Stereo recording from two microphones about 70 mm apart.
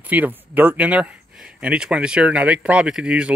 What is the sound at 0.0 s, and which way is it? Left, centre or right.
Speech, right.